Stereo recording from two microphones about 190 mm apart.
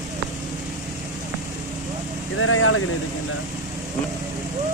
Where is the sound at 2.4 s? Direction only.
90° left.